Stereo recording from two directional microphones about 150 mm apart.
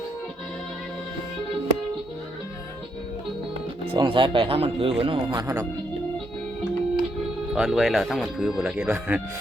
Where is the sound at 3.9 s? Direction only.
30° right (ahead or behind).